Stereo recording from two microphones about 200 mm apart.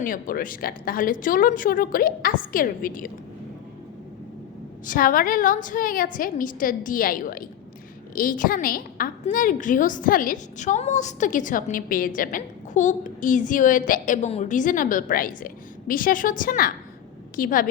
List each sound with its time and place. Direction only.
0.0 s a woman's voice: 45° left (ahead or behind)
4.9 s a woman's voice: 45° left (ahead or behind)